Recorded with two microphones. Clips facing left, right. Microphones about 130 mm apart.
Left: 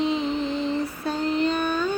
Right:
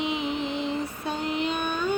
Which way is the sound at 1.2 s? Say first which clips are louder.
Left 5 dB; 10° right (ahead or behind).